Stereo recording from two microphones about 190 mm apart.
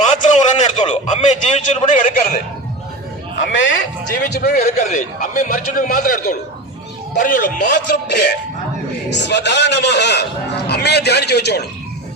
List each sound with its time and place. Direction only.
0.0 s a sound: 40° left (ahead or behind)
3.3 s a man's voice: 70° left (ahead or behind)
4.1 s a man's voice: 55° left (ahead or behind)
4.8 s a man's voice: 40° left (ahead or behind)
9.0 s a man's voice: 65° left (ahead or behind)